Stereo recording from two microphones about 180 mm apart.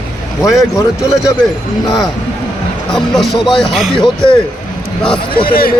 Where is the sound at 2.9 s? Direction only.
Centre (ahead or behind).